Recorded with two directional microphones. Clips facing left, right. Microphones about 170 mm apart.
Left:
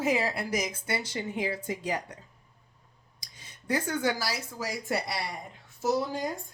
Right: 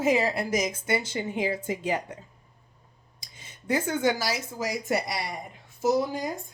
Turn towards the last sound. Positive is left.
turn(degrees=-15)  # may be behind; listen again after turning